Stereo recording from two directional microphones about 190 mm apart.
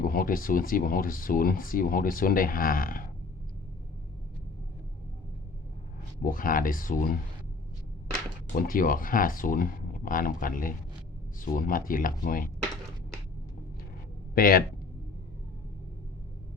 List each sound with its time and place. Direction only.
0.1 s speech: 50° left (ahead or behind)
6.2 s speech: 45° left (ahead or behind)
8.5 s speech: 50° left (ahead or behind)
14.3 s speech: 50° left (ahead or behind)